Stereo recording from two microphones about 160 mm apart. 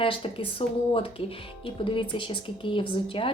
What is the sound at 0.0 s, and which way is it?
Speech, 35° left (ahead or behind).